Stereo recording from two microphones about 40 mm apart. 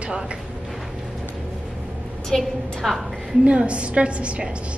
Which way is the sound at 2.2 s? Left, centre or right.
Centre.